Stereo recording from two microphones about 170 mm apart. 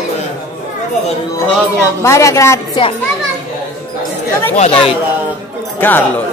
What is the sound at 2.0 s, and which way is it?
Speech, 15° left (ahead or behind).